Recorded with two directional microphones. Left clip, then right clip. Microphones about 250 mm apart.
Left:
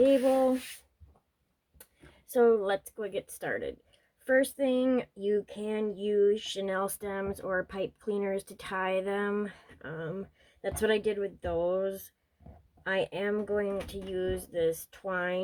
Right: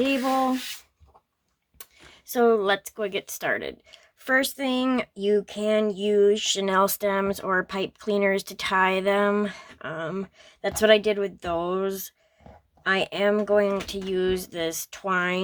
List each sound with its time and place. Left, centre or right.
2.3 s speech: right